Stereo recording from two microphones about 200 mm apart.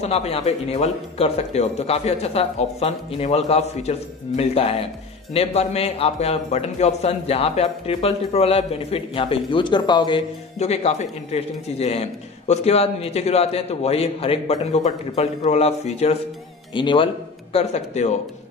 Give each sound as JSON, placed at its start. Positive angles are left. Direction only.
{"t": 0.0, "sound": "a man's voice", "side_deg": 30}
{"t": 10.6, "sound": "a man's voice", "side_deg": 35}